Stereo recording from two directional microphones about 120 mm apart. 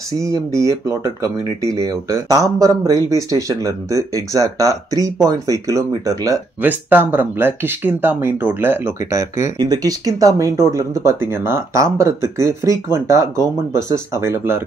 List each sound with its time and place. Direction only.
0.2 s speech: 25° right (ahead or behind)
6.6 s speech: 15° right (ahead or behind)